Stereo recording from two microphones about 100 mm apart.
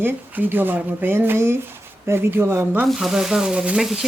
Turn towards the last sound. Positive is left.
turn(degrees=-5)  # may be behind; listen again after turning